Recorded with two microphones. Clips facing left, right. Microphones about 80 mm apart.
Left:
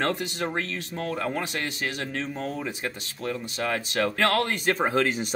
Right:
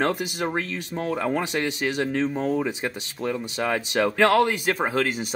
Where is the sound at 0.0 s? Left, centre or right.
Centre.